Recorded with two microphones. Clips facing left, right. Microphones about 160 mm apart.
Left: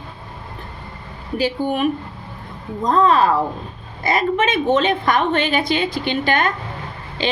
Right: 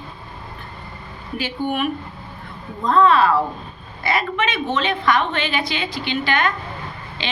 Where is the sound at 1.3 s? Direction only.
35° left (ahead or behind).